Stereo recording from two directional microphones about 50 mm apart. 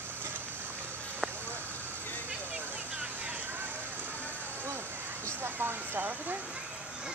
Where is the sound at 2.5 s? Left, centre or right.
Right.